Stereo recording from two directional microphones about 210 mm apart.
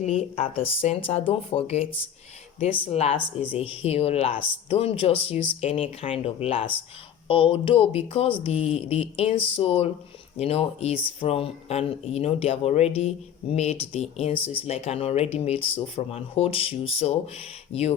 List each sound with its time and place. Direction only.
0.0 s speech: 30° left (ahead or behind)
2.9 s speech: 30° left (ahead or behind)